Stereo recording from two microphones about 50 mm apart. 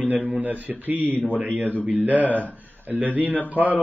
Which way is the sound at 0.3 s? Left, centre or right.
Right.